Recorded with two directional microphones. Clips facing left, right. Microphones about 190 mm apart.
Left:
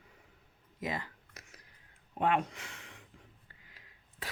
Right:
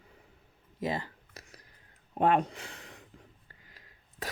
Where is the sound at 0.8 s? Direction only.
30° right (ahead or behind).